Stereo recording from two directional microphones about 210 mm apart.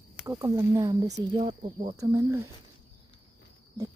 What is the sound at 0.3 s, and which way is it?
Speech, 15° right (ahead or behind).